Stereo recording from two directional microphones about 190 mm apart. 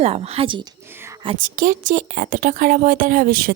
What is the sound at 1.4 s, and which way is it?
A woman's voice, 45° right (ahead or behind).